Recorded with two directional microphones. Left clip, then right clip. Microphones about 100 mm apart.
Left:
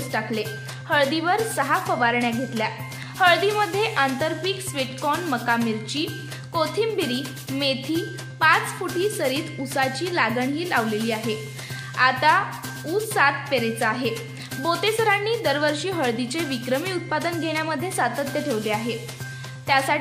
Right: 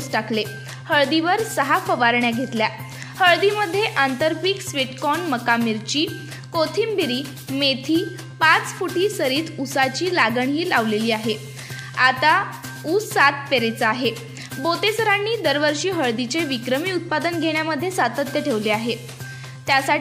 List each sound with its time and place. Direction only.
0.1 s a child's voice: 35° right (ahead or behind)
3.2 s a woman's voice: 20° right (ahead or behind); by 11.3 s 35° right (ahead or behind)
12.0 s a woman's voice: 25° right (ahead or behind)
14.6 s a woman's voice: 20° right (ahead or behind)